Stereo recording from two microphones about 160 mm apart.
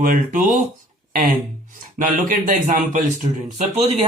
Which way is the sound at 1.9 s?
55° right (ahead or behind).